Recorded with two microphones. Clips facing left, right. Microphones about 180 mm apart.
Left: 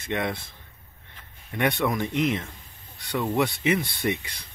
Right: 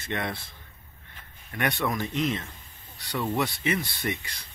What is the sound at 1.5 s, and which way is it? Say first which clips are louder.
Speech: left 4 dB; 20° left (ahead or behind).